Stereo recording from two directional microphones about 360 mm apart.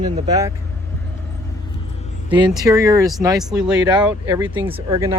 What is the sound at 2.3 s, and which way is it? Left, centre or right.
Speech, centre.